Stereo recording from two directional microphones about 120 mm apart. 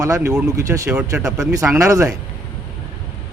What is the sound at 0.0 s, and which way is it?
Speech, 25° right (ahead or behind).